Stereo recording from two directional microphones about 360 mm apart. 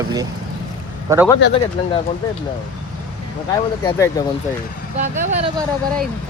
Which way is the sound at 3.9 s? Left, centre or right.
Centre.